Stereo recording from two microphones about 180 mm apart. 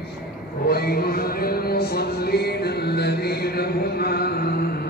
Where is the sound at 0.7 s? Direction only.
60° left (ahead or behind).